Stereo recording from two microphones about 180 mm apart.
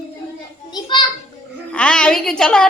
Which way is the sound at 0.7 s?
25° left (ahead or behind).